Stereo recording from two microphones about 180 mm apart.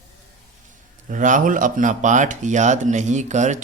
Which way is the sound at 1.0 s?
45° right (ahead or behind).